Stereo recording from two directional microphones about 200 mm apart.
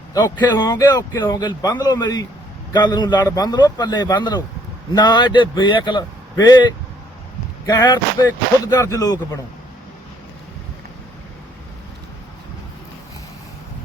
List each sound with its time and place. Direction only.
0.1 s a man's voice: 20° left (ahead or behind)
7.7 s a man's voice: 20° left (ahead or behind)